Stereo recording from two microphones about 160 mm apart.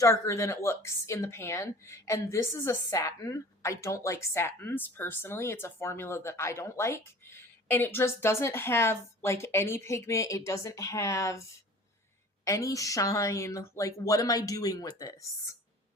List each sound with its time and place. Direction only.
0.0 s a woman's voice: 20° left (ahead or behind)
12.5 s speech: 20° left (ahead or behind)